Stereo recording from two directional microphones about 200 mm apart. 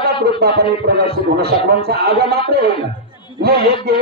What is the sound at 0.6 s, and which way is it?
A man's voice, 50° right (ahead or behind).